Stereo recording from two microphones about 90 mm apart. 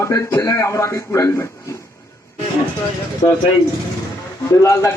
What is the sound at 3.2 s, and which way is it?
Speech, 65° left (ahead or behind).